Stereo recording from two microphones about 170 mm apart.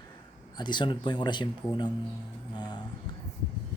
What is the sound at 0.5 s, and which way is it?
Speech, 25° left (ahead or behind).